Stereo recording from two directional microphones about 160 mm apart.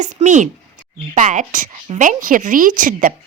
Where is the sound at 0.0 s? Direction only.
50° right (ahead or behind).